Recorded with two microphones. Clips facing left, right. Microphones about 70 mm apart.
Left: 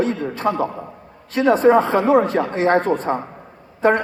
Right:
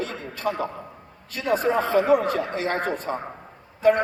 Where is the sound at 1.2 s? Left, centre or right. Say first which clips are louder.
Left 9 dB; left.